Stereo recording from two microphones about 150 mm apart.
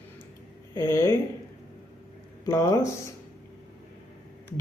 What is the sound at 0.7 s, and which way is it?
Speech, 15° left (ahead or behind).